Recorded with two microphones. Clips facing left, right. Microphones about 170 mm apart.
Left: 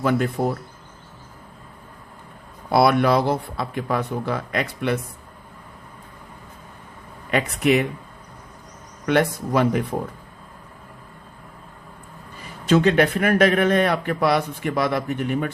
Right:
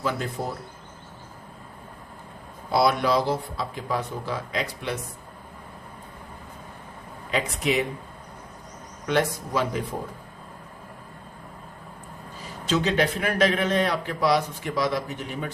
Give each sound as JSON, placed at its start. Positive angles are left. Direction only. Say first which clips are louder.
{"t": 0.0, "sound": "a man's voice", "louder": "left 7 dB", "side_deg": 60}
{"t": 2.7, "sound": "a man's voice", "louder": "left 4 dB", "side_deg": 60}
{"t": 7.3, "sound": "a man's voice", "louder": "left 6 dB", "side_deg": 60}
{"t": 9.0, "sound": "a man's voice", "louder": "left 4 dB", "side_deg": 60}
{"t": 12.6, "sound": "a man's voice", "louder": "left 6 dB", "side_deg": 55}